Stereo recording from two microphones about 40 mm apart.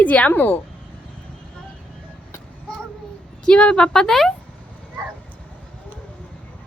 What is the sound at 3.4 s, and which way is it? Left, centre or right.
Speech, left.